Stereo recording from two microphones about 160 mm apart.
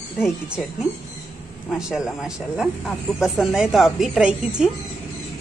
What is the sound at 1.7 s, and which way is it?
Speech, 5° right (ahead or behind).